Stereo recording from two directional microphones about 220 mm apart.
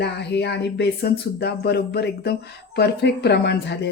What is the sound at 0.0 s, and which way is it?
Speech, 50° left (ahead or behind).